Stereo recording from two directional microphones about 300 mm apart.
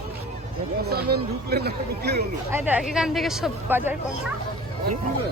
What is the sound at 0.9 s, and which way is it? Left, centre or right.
Speech, right.